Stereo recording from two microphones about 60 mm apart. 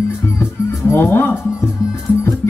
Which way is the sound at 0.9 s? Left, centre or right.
Left.